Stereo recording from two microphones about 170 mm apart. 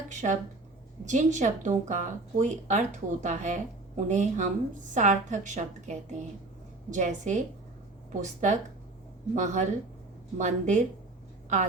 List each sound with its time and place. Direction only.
0.1 s speech: 45° right (ahead or behind)